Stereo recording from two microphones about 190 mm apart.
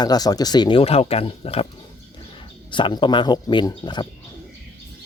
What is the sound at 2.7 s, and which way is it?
Speech, 25° left (ahead or behind).